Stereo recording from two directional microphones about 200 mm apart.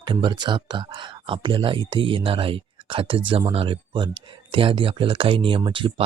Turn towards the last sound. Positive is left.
turn(degrees=-25)  # may be behind; listen again after turning